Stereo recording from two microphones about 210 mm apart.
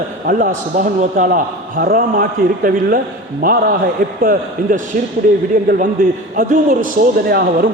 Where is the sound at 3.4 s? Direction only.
40° right (ahead or behind).